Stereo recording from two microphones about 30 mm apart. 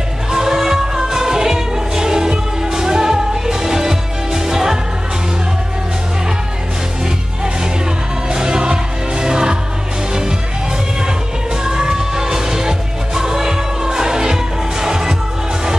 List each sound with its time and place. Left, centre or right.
0.3 s music: centre
8.3 s music: right
11.6 s music: centre